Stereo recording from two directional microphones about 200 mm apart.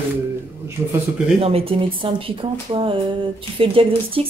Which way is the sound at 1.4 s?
30° right (ahead or behind).